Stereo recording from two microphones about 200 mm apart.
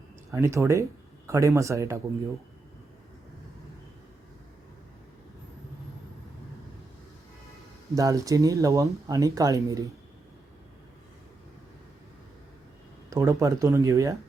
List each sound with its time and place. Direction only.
0.3 s speech: 15° right (ahead or behind)
7.9 s speech: 15° right (ahead or behind)
13.1 s speech: 15° right (ahead or behind)